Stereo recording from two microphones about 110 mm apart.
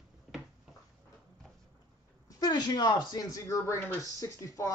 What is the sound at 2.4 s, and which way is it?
Speech, 40° left (ahead or behind).